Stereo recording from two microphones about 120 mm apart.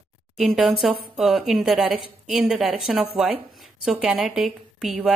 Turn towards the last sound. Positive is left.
turn(degrees=-5)  # may be behind; listen again after turning